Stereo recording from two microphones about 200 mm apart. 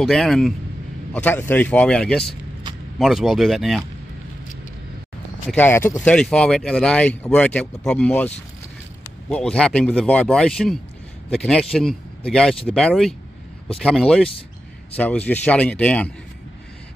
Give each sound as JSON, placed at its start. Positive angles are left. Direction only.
{"t": 0.0, "sound": "speech", "side_deg": 0}
{"t": 5.5, "sound": "speech", "side_deg": 10}
{"t": 9.3, "sound": "speech", "side_deg": 5}